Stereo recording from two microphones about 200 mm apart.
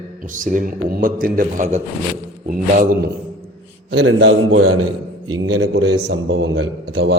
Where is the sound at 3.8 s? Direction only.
55° right (ahead or behind).